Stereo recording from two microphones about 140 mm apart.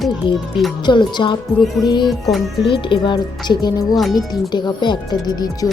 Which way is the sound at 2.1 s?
Centre (ahead or behind).